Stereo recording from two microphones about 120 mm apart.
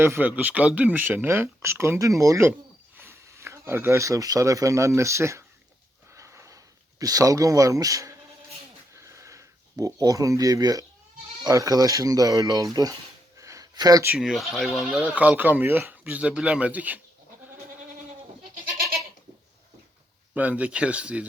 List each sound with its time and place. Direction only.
0.0 s speech: 20° right (ahead or behind)
6.1 s sniff: 25° right (ahead or behind)
7.0 s speech: 30° right (ahead or behind)
8.9 s a sound: 25° right (ahead or behind)
11.4 s speech: 30° right (ahead or behind)
13.3 s a sound: 25° right (ahead or behind)
14.2 s speech: centre (ahead or behind)
20.3 s speech: 10° right (ahead or behind)